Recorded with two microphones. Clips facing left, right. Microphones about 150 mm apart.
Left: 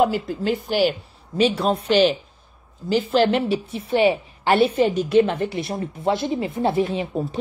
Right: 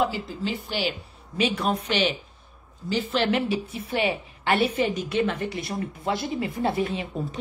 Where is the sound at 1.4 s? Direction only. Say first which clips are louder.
Left 5 dB; 30° left (ahead or behind).